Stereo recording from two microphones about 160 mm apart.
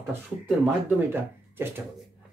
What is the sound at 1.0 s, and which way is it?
Speech, 15° right (ahead or behind).